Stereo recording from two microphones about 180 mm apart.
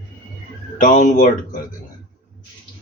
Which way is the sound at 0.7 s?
45° left (ahead or behind).